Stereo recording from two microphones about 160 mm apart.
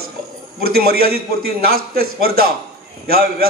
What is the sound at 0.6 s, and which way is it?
A man's voice, 75° right (ahead or behind).